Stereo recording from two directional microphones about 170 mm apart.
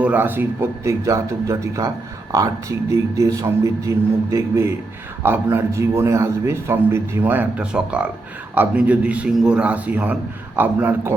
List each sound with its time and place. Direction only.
0.0 s speech: 10° right (ahead or behind)